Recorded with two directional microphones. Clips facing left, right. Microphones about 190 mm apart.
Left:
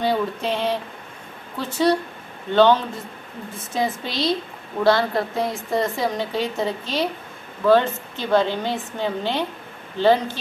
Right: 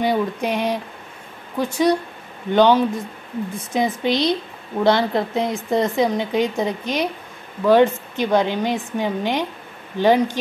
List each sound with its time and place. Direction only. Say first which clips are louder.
0.0 s a woman's voice: right 2 dB; 15° right (ahead or behind)